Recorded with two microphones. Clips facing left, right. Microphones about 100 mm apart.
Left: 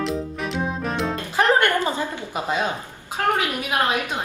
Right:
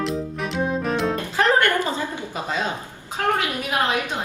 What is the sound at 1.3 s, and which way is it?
Music, 20° left (ahead or behind).